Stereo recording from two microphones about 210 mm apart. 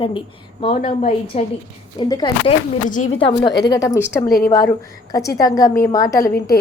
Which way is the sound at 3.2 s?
25° left (ahead or behind).